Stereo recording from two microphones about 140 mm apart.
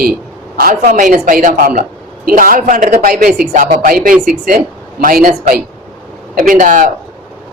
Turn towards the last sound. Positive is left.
turn(degrees=-70)  # may be behind; listen again after turning